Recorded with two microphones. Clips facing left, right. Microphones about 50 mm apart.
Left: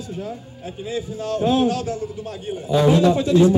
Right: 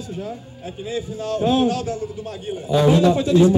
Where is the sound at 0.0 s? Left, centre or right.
Right.